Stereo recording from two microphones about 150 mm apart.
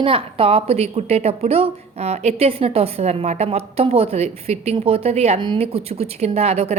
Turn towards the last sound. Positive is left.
turn(degrees=-45)  # may be behind; listen again after turning